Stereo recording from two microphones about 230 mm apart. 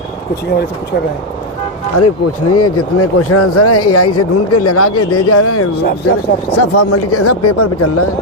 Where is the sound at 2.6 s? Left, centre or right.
Left.